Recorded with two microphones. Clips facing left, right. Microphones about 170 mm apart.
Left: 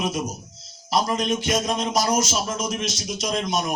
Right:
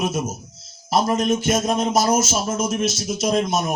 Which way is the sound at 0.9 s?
5° right (ahead or behind).